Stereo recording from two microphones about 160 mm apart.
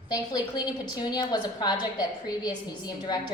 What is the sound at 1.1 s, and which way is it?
A woman's voice, 25° left (ahead or behind).